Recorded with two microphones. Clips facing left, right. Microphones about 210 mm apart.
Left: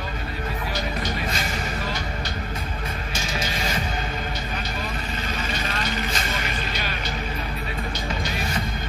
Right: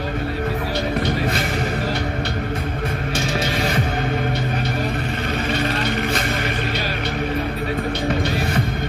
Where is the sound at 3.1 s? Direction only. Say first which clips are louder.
Right 7 dB; 65° right (ahead or behind).